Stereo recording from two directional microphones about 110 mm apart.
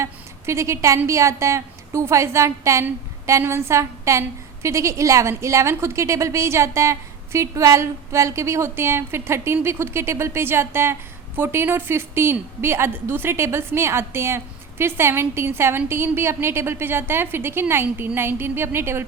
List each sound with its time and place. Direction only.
0.0 s a woman's voice: 25° right (ahead or behind)